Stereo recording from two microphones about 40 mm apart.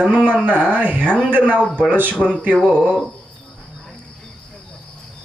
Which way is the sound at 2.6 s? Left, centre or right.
Right.